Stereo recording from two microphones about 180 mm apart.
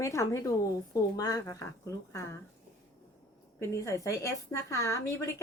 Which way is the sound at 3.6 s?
15° left (ahead or behind).